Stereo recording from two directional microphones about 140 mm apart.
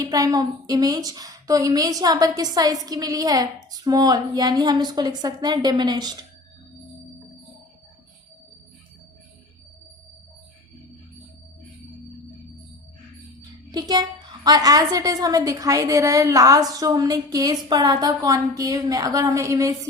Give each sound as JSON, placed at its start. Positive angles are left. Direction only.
{"t": 0.0, "sound": "a woman's voice", "side_deg": -25}
{"t": 13.7, "sound": "a woman's voice", "side_deg": -30}